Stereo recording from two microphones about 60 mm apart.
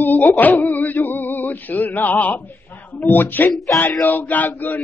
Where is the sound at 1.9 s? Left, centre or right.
Left.